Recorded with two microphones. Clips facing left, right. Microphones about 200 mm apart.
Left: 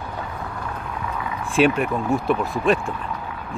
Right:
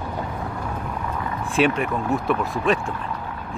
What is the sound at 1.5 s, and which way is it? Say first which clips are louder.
Speech: left 2 dB; centre (ahead or behind).